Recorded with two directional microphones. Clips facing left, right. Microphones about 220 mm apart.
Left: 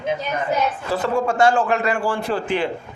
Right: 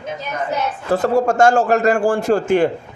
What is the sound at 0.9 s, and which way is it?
A man's voice, 40° right (ahead or behind).